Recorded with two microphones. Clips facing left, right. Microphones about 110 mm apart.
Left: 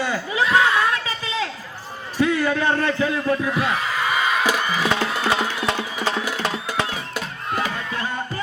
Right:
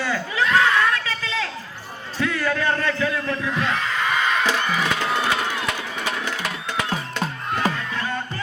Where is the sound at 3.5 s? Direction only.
10° left (ahead or behind).